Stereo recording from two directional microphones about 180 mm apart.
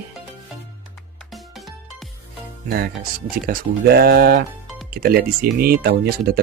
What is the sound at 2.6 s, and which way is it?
Speech, 55° right (ahead or behind).